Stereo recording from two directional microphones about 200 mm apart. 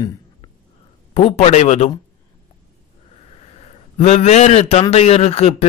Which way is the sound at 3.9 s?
30° left (ahead or behind).